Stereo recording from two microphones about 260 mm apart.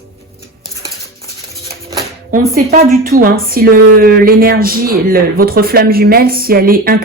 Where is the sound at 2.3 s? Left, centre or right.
Right.